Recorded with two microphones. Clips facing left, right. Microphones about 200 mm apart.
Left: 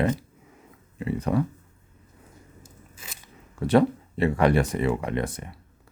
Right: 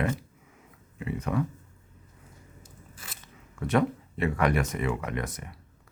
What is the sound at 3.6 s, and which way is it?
Speech, 35° left (ahead or behind).